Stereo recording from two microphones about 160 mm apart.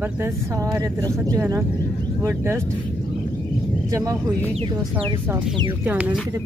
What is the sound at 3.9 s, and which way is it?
Speech, 15° right (ahead or behind).